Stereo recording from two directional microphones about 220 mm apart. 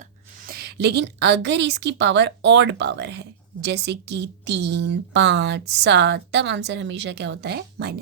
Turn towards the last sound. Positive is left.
turn(degrees=-45)  # may be behind; listen again after turning